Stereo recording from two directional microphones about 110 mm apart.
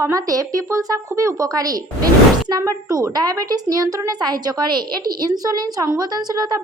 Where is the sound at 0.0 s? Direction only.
30° right (ahead or behind).